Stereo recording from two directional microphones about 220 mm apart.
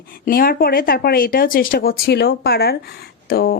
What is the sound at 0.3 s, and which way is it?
Speech, 40° left (ahead or behind).